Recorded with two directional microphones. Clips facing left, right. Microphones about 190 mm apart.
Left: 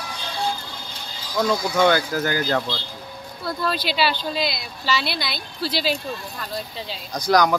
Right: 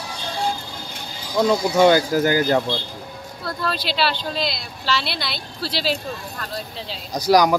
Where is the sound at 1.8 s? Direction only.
15° right (ahead or behind).